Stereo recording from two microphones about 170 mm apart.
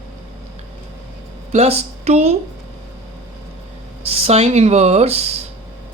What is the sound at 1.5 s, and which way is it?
Speech, 40° right (ahead or behind).